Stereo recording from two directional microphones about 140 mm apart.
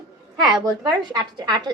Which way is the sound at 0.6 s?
30° right (ahead or behind).